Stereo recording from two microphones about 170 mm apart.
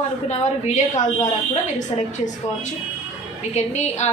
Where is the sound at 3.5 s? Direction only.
40° left (ahead or behind).